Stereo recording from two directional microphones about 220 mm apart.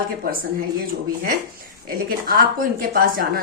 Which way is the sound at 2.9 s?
40° right (ahead or behind).